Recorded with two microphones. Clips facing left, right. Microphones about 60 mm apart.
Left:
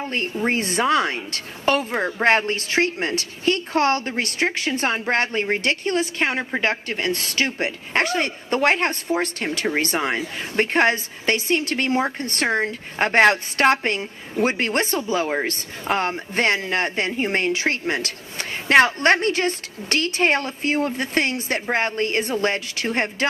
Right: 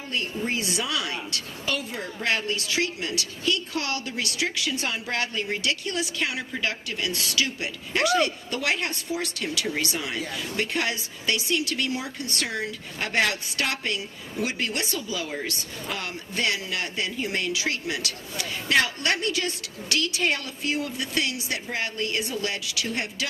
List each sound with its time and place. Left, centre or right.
0.0 s a woman's voice: left